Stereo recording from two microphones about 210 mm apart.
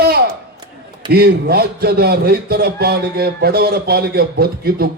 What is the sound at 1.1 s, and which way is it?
A man's voice, 50° right (ahead or behind).